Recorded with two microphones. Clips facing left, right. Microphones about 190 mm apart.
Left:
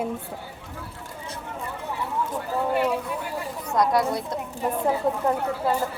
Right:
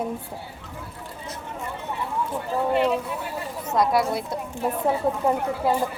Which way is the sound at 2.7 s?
25° right (ahead or behind).